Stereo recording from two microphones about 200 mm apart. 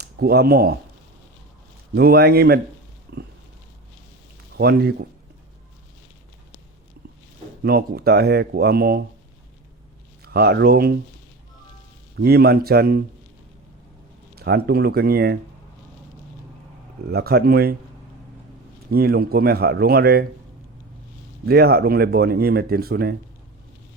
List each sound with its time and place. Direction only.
0.0 s speech: 50° right (ahead or behind)
2.0 s speech: 50° right (ahead or behind)
3.1 s pig: 55° right (ahead or behind)
4.5 s speech: 50° right (ahead or behind)
7.6 s speech: 50° right (ahead or behind)
10.2 s speech: 50° right (ahead or behind)
12.1 s speech: 50° right (ahead or behind)
14.3 s speech: 50° right (ahead or behind)
17.1 s speech: 55° right (ahead or behind)
18.9 s speech: 50° right (ahead or behind)
21.4 s speech: 50° right (ahead or behind)